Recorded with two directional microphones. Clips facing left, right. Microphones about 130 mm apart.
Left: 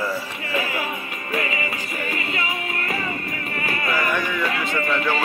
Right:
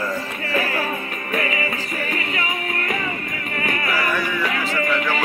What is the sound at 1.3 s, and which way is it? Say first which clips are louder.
Music: right 2 dB; 30° left (ahead or behind).